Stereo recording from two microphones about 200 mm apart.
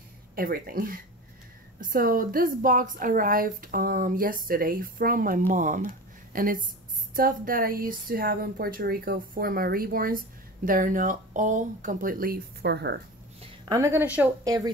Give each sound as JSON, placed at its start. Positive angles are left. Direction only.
{"t": 0.4, "sound": "speech", "side_deg": -45}
{"t": 13.7, "sound": "a woman's voice", "side_deg": -15}